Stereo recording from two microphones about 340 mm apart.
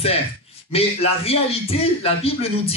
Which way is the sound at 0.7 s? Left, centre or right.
Centre.